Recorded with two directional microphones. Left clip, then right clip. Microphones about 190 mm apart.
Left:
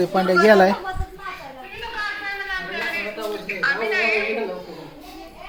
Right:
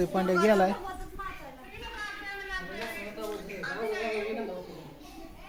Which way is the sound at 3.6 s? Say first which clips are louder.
Left 13 dB; centre (ahead or behind).